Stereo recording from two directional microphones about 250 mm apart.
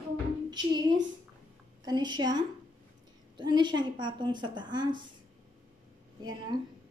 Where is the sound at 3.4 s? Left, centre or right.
Centre.